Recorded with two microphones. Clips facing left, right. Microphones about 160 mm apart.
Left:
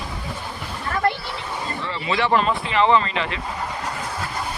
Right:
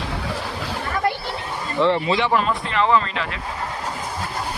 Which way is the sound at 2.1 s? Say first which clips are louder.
Right 1 dB; 15° right (ahead or behind).